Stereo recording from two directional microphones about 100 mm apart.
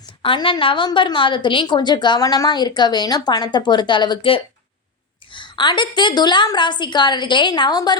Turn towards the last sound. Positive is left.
turn(degrees=45)  # may be behind; listen again after turning